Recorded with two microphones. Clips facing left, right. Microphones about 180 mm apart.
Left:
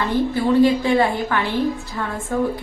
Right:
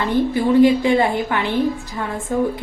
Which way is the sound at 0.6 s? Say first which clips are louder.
Right 2 dB; 20° right (ahead or behind).